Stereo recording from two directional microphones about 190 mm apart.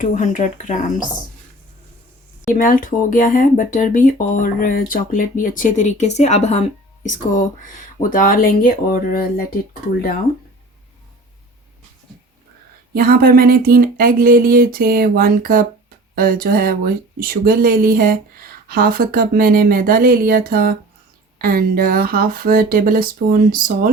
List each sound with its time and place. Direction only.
0.0 s speech: 40° left (ahead or behind)
2.5 s speech: 45° left (ahead or behind)
12.9 s speech: 50° right (ahead or behind)